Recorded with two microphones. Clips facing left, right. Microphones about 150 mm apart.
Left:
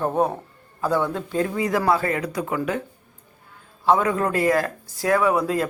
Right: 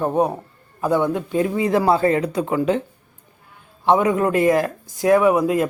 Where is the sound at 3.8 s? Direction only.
20° right (ahead or behind).